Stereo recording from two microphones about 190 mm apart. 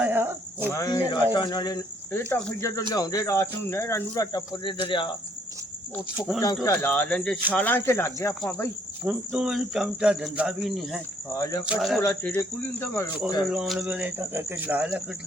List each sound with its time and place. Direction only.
0.0 s cricket: 10° right (ahead or behind)
0.7 s speech: 20° left (ahead or behind)
6.1 s cricket: centre (ahead or behind)
6.4 s speech: 15° left (ahead or behind)
9.0 s cricket: 5° right (ahead or behind)
11.3 s speech: 20° left (ahead or behind)
11.6 s cricket: centre (ahead or behind)
12.0 s speech: 10° left (ahead or behind)
13.5 s speech: centre (ahead or behind)